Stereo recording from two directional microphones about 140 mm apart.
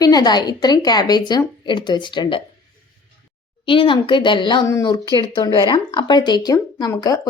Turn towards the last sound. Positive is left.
turn(degrees=25)  # may be behind; listen again after turning